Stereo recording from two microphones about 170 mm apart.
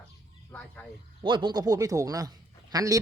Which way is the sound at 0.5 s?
10° left (ahead or behind).